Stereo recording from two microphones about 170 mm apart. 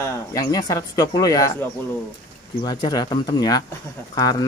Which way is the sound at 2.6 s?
25° left (ahead or behind).